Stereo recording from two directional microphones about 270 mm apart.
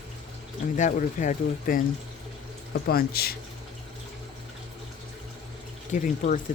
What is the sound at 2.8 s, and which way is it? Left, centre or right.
Speech, left.